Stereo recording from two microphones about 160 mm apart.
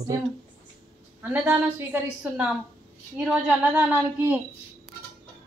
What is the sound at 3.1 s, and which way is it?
A woman's voice, 10° right (ahead or behind).